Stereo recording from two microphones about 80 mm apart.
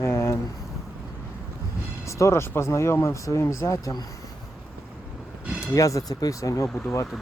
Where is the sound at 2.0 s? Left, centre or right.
Left.